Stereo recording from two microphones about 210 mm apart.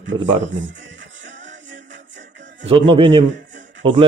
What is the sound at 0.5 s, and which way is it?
Speech, 60° right (ahead or behind).